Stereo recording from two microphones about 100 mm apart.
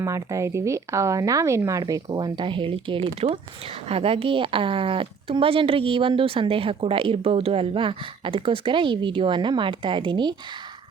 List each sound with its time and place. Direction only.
0.0 s speech: 30° right (ahead or behind)
1.8 s a woman's voice: 45° right (ahead or behind)